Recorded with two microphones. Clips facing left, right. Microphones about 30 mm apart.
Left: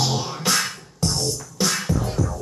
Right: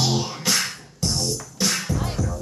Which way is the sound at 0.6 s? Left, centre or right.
Centre.